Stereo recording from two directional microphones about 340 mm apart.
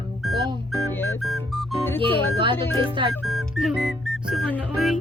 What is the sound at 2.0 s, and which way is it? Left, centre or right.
Music, centre.